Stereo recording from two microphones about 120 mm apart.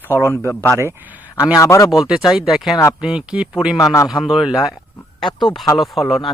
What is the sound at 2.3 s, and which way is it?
A man's voice, 5° right (ahead or behind).